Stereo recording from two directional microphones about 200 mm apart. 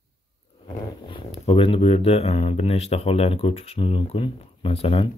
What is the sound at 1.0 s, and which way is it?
Speech, 25° left (ahead or behind).